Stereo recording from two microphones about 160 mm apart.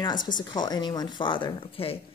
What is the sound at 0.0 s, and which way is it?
A woman's voice, 25° left (ahead or behind).